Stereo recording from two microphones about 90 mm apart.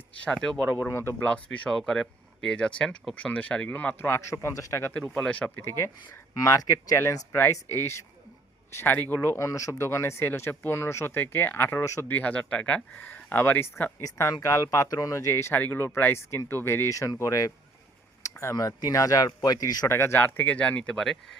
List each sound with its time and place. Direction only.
0.3 s speech: 5° left (ahead or behind)
0.9 s speech: 30° left (ahead or behind)
1.2 s speech: 15° left (ahead or behind); by 4.9 s 30° left (ahead or behind)
5.1 s speech: 15° left (ahead or behind)
5.6 s speech: 30° left (ahead or behind)
12.0 s speech: 15° left (ahead or behind)
14.0 s speech: 40° left (ahead or behind)
18.2 s a sound: 30° left (ahead or behind)
18.5 s speech: 40° left (ahead or behind)
19.9 s speech: 30° left (ahead or behind); by 21.3 s 5° left (ahead or behind)